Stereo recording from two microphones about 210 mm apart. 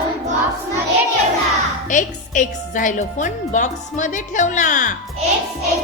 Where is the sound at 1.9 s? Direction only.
35° left (ahead or behind).